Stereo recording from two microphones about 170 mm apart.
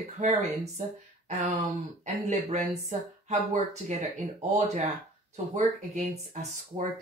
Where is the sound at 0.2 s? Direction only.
40° right (ahead or behind).